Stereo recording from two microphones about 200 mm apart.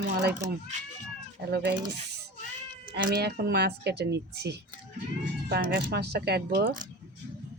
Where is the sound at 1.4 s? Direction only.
55° right (ahead or behind).